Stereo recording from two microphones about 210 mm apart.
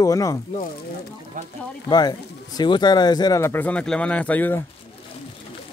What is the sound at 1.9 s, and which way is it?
Speech, 20° left (ahead or behind).